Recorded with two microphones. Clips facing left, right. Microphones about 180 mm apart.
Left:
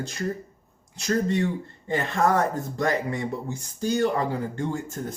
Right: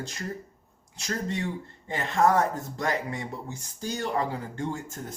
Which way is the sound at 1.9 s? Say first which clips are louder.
Left 1 dB; 55° left (ahead or behind).